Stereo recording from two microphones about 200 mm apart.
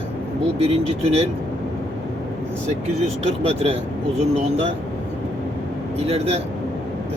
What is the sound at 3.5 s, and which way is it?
Speech, 30° right (ahead or behind).